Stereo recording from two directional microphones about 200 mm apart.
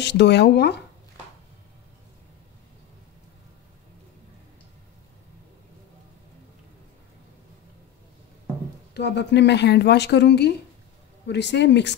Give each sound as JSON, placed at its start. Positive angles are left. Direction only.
{"t": 0.0, "sound": "speech", "side_deg": 60}
{"t": 8.9, "sound": "speech", "side_deg": 60}